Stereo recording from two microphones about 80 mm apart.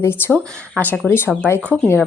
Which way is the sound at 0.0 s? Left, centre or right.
Left.